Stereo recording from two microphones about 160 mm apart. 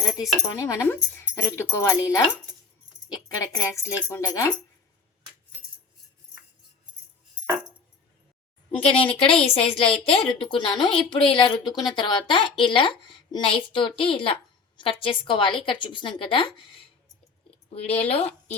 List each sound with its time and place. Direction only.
0.6 s speech: 15° left (ahead or behind)
8.8 s a woman's voice: 35° left (ahead or behind)